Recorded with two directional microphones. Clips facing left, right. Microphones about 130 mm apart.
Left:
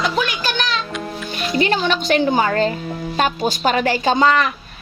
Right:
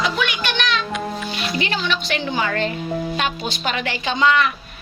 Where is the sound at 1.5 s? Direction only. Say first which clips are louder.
Left 7 dB; 45° left (ahead or behind).